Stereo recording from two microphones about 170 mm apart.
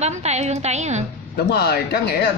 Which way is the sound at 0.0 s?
40° right (ahead or behind).